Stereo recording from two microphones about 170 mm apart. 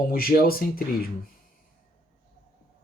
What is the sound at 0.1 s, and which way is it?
Speech, 60° left (ahead or behind).